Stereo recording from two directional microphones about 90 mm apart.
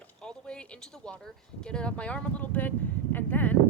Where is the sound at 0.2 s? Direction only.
10° left (ahead or behind).